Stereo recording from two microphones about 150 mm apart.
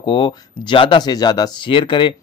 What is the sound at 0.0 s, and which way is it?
Speech, 35° left (ahead or behind).